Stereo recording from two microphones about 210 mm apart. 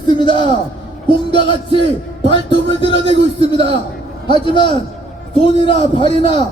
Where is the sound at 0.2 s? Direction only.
25° left (ahead or behind).